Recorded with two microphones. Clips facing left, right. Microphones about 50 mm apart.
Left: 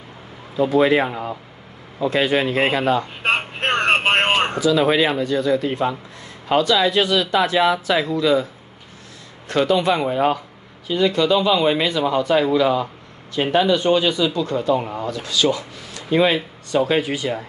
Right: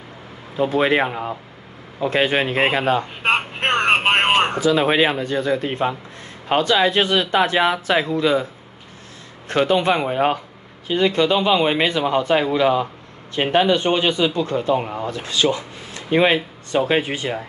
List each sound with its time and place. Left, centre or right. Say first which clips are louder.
0.6 s speech: left 2 dB; right
3.2 s a sound: right 1 dB; centre
4.6 s speech: even; right
9.5 s speech: even; right